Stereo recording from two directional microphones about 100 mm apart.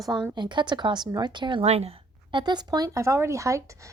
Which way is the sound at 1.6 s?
90° right.